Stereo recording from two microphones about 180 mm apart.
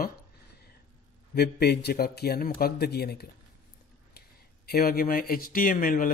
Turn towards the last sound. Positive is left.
turn(degrees=50)  # may be behind; listen again after turning